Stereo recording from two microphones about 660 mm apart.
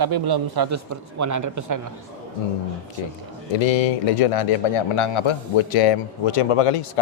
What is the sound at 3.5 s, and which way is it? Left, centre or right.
A man's voice, left.